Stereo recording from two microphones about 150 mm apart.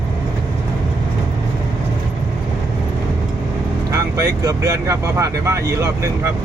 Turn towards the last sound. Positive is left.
turn(degrees=-20)  # may be behind; listen again after turning